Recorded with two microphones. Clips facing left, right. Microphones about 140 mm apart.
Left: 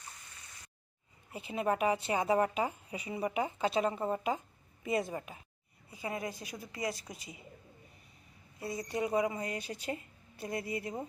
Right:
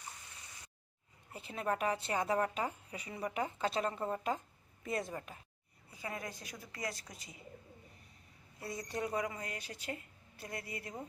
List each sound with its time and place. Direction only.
1.3 s a woman's voice: 10° left (ahead or behind)
8.6 s a woman's voice: 5° left (ahead or behind); by 11.0 s 25° left (ahead or behind)